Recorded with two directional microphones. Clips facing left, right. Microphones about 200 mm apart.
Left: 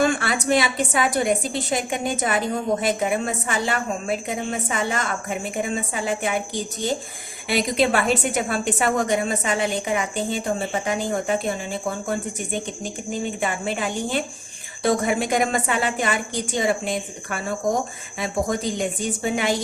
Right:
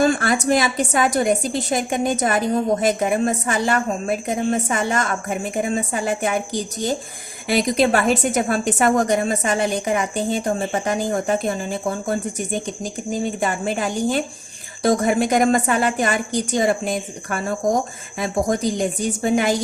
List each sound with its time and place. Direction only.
0.0 s a woman's voice: 40° right (ahead or behind)
7.4 s a woman's voice: 40° right (ahead or behind)
12.8 s a woman's voice: 40° right (ahead or behind)